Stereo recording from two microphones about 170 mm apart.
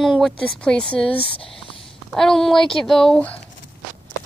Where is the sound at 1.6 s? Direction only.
30° left (ahead or behind).